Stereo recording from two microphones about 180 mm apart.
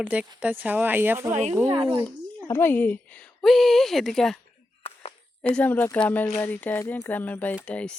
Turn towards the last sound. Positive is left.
turn(degrees=5)  # may be behind; listen again after turning